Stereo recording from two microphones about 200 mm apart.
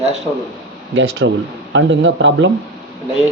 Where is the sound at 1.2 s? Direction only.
75° right (ahead or behind).